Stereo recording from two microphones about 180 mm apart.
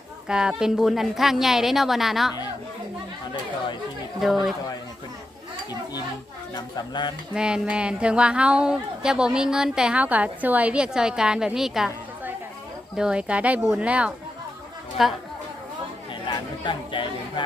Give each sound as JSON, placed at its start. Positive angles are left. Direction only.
{"t": 0.3, "sound": "a woman's voice", "side_deg": -5}
{"t": 4.2, "sound": "a woman's voice", "side_deg": 0}
{"t": 6.5, "sound": "speech", "side_deg": 25}
{"t": 7.3, "sound": "a woman's voice", "side_deg": -5}
{"t": 16.3, "sound": "chatter", "side_deg": 25}
{"t": 16.6, "sound": "a sound", "side_deg": 25}